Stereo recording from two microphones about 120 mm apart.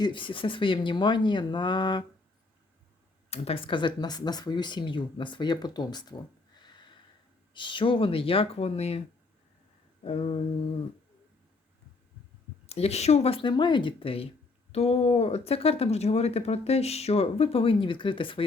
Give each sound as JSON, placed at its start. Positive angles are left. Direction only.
{"t": 0.0, "sound": "speech", "side_deg": 45}
{"t": 3.2, "sound": "speech", "side_deg": 55}
{"t": 7.5, "sound": "speech", "side_deg": 45}
{"t": 10.0, "sound": "speech", "side_deg": 55}
{"t": 12.6, "sound": "speech", "side_deg": 60}
{"t": 13.4, "sound": "speech", "side_deg": 40}